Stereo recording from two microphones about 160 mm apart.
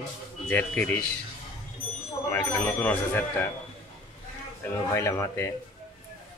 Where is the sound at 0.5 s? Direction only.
10° left (ahead or behind).